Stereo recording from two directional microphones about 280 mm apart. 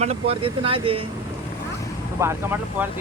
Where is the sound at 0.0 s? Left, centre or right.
Right.